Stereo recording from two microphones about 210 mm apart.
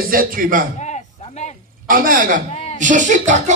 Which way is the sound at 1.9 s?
40° right (ahead or behind).